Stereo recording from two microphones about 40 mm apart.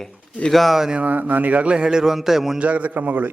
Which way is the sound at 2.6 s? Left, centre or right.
Right.